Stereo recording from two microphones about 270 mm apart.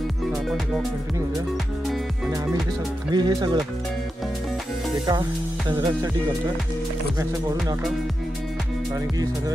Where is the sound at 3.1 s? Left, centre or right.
Centre.